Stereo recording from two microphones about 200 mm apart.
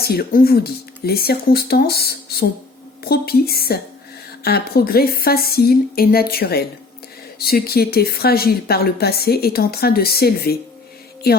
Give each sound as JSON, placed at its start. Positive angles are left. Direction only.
{"t": 0.0, "sound": "a woman's voice", "side_deg": 50}